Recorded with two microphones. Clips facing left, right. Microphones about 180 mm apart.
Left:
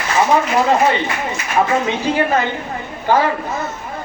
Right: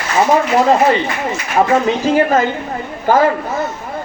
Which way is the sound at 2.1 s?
45° right (ahead or behind).